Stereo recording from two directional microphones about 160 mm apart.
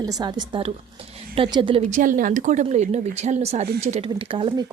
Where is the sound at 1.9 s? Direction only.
55° right (ahead or behind); by 4.5 s 35° right (ahead or behind).